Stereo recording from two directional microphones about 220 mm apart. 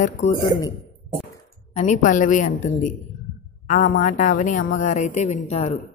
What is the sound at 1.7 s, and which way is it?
A woman's voice, 30° left (ahead or behind).